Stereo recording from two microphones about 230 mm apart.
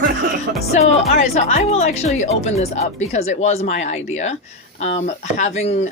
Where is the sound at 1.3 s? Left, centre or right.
Left.